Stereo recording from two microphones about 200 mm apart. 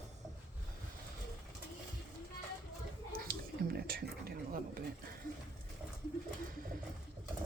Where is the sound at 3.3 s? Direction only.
50° right (ahead or behind).